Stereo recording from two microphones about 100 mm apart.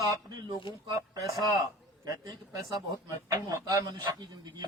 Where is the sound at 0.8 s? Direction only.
40° right (ahead or behind).